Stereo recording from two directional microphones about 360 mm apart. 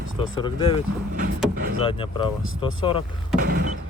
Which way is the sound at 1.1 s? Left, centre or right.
Right.